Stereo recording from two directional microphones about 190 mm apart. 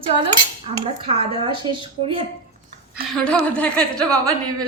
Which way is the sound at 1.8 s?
25° right (ahead or behind).